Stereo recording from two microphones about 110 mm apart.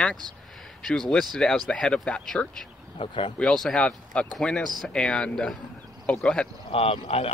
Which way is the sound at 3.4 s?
5° left (ahead or behind).